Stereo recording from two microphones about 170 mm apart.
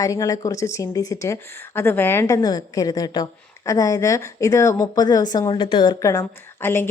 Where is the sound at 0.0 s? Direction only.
20° left (ahead or behind).